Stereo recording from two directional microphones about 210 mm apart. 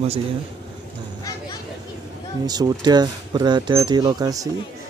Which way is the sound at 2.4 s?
20° right (ahead or behind).